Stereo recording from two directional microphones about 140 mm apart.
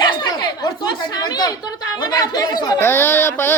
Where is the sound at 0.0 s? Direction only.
30° left (ahead or behind).